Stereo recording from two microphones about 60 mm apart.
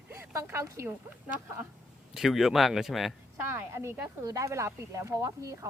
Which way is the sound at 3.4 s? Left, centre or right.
Right.